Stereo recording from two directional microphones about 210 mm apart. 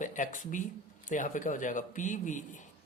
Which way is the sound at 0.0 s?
35° left (ahead or behind).